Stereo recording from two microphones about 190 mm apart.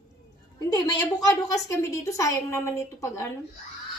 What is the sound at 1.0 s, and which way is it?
A woman's voice, 20° left (ahead or behind).